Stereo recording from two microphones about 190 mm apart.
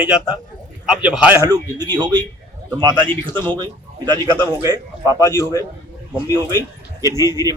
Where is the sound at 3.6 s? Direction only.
20° right (ahead or behind).